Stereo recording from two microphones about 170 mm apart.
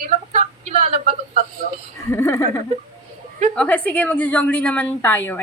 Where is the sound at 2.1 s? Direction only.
15° left (ahead or behind).